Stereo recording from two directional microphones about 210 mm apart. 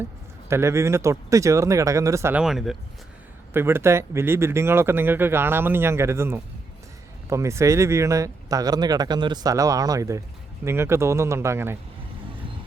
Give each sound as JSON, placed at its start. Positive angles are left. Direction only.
{"t": 0.4, "sound": "speech", "side_deg": -15}